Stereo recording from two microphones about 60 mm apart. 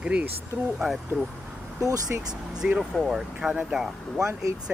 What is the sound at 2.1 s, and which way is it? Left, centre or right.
Speech, right.